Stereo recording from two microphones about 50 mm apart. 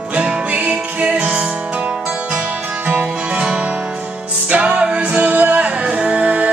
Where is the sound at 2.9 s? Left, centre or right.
Right.